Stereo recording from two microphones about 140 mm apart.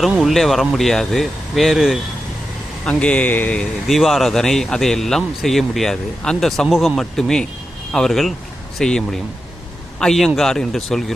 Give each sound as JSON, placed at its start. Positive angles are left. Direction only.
{"t": 0.0, "sound": "speech", "side_deg": 0}